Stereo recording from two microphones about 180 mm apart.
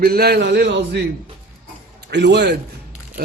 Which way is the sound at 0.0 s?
60° right (ahead or behind).